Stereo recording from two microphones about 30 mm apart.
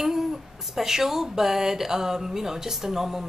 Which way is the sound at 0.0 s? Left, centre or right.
Centre.